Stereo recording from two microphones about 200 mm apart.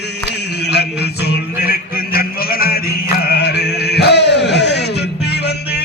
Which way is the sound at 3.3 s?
55° left (ahead or behind).